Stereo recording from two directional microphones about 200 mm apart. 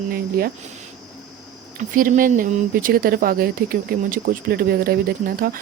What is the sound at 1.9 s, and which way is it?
Speech, 45° right (ahead or behind).